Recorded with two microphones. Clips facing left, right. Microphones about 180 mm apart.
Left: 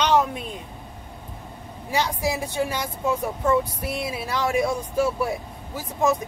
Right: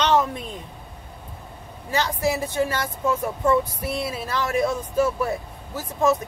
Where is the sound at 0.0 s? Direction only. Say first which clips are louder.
Even; 10° left (ahead or behind).